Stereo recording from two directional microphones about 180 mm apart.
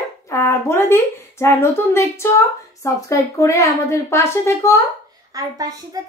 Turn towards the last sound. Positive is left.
turn(degrees=-20)  # may be behind; listen again after turning